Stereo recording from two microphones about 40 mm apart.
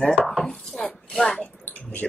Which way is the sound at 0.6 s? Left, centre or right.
Centre.